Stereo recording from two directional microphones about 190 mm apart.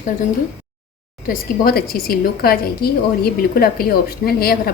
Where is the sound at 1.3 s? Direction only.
50° left (ahead or behind).